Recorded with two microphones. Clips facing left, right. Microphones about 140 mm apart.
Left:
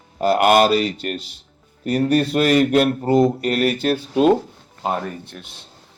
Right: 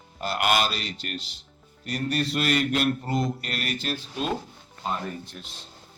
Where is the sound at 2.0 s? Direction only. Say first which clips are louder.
Left 10 dB; 50° left (ahead or behind).